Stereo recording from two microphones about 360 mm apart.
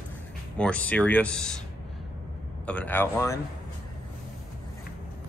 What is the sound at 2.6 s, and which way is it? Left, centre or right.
Speech, centre.